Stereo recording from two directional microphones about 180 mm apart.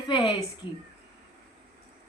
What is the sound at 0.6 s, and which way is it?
Speech, 30° left (ahead or behind).